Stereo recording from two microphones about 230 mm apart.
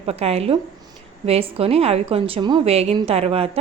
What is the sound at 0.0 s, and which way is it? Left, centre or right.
A woman's voice, right.